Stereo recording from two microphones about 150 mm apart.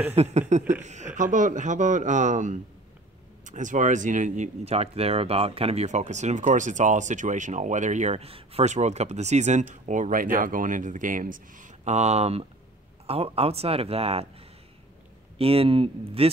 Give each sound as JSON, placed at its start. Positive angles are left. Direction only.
{"t": 0.1, "sound": "speech", "side_deg": -45}
{"t": 15.3, "sound": "speech", "side_deg": -40}